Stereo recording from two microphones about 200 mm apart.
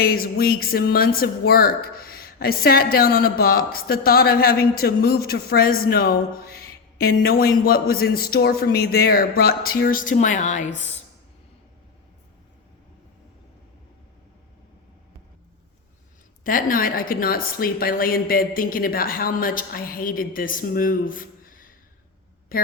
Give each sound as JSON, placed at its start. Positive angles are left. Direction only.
{"t": 0.0, "sound": "speech", "side_deg": 50}
{"t": 16.4, "sound": "speech", "side_deg": 45}
{"t": 22.5, "sound": "a sound", "side_deg": 45}